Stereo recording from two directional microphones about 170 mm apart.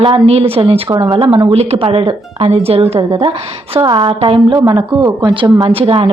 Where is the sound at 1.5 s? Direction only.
35° right (ahead or behind).